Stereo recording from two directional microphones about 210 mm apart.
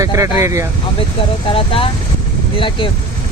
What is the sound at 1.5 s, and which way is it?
Speech, 25° left (ahead or behind).